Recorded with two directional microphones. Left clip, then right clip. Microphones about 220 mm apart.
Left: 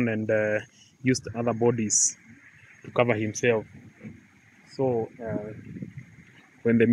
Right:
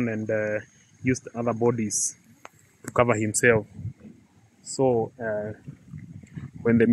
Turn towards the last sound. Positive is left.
turn(degrees=0)  # may be behind; listen again after turning